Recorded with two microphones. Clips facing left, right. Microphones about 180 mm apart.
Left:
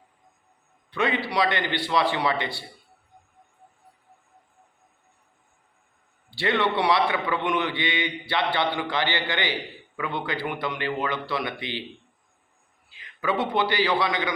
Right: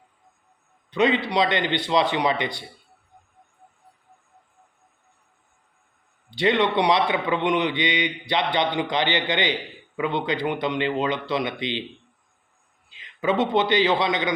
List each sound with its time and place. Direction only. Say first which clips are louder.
0.9 s a man's voice: right 5 dB; 20° right (ahead or behind)
6.3 s a man's voice: right 3 dB; 20° right (ahead or behind)
12.9 s a man's voice: right 4 dB; 20° right (ahead or behind)